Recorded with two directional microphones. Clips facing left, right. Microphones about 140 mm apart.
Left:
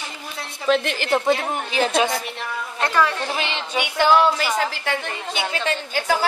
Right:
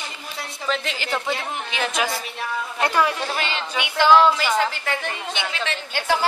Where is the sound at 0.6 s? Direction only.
55° left (ahead or behind); by 2.0 s 30° left (ahead or behind).